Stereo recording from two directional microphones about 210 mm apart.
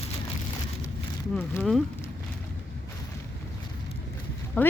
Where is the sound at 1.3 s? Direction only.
10° left (ahead or behind).